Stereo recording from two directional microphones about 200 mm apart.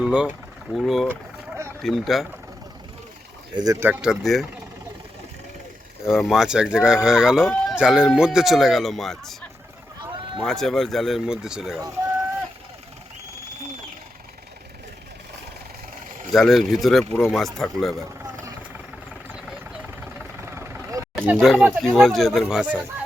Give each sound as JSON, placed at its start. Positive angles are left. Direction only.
{"t": 0.0, "sound": "speech", "side_deg": -5}
{"t": 3.5, "sound": "speech", "side_deg": -20}
{"t": 6.1, "sound": "speech", "side_deg": 0}
{"t": 16.3, "sound": "speech", "side_deg": 0}
{"t": 20.1, "sound": "vehicle", "side_deg": -15}
{"t": 21.2, "sound": "speech", "side_deg": 0}